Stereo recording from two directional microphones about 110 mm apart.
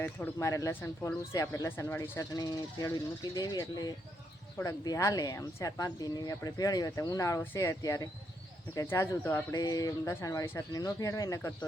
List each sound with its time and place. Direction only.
0.3 s speech: 30° left (ahead or behind)
9.6 s speech: 35° left (ahead or behind)